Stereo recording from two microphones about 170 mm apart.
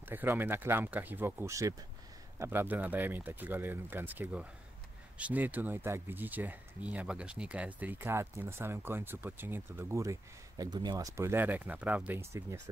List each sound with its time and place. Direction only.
0.1 s speech: 10° right (ahead or behind)